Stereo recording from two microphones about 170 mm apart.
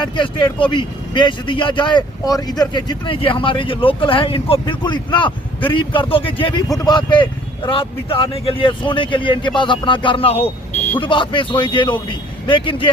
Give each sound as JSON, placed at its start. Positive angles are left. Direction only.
{"t": 0.0, "sound": "speech", "side_deg": 30}